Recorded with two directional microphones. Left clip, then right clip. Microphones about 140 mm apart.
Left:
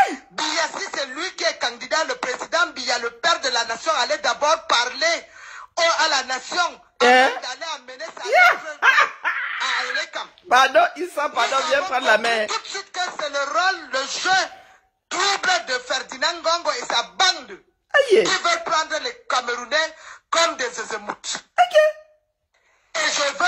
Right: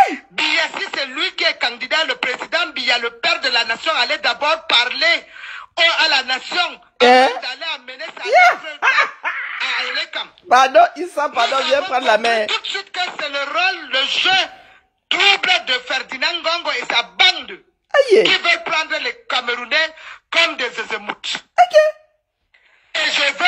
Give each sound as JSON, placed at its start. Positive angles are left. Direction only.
{"t": 0.0, "sound": "laughter", "side_deg": -35}
{"t": 1.4, "sound": "a sound", "side_deg": -40}
{"t": 7.0, "sound": "a sound", "side_deg": -45}
{"t": 12.7, "sound": "a man's voice", "side_deg": -35}
{"t": 21.5, "sound": "beatboxing", "side_deg": -45}
{"t": 22.9, "sound": "speech", "side_deg": -30}